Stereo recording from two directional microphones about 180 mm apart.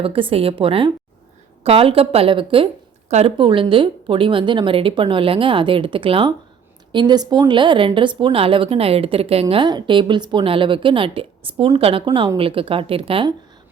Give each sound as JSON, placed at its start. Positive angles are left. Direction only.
{"t": 0.0, "sound": "a woman's voice", "side_deg": -30}